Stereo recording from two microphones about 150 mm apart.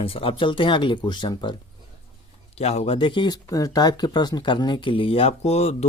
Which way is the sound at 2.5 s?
45° left (ahead or behind).